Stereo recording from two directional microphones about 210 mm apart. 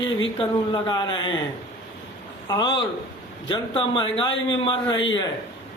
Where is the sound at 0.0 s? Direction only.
65° left (ahead or behind).